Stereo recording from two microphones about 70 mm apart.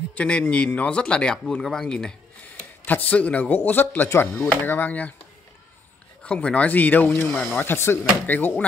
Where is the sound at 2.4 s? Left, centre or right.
Left.